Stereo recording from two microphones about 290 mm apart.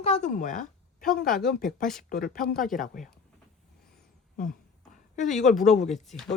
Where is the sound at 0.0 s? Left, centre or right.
Left.